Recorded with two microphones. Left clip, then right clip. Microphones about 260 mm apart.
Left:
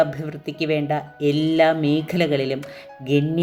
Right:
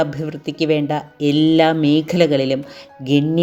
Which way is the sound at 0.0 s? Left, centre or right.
Centre.